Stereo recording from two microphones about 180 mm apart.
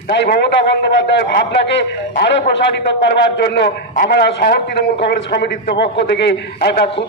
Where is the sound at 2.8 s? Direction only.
70° left (ahead or behind).